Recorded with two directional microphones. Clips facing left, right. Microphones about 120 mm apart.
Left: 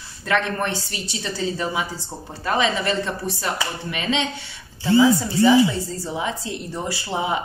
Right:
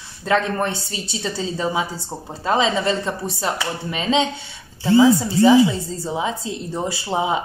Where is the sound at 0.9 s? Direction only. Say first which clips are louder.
Right 3 dB; 25° right (ahead or behind).